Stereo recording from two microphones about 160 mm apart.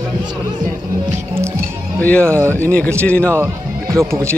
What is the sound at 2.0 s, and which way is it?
Speech, 10° left (ahead or behind).